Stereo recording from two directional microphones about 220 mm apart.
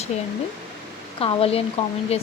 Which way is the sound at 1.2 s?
25° left (ahead or behind).